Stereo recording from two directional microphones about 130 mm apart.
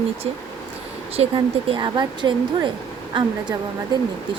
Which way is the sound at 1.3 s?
35° right (ahead or behind).